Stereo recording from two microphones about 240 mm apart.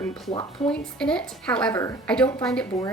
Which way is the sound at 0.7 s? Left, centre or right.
Centre.